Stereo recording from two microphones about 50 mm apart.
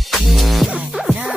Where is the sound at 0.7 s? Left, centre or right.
Centre.